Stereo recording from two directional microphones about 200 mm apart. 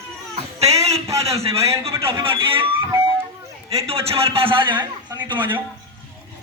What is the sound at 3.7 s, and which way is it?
A man's voice, 30° right (ahead or behind).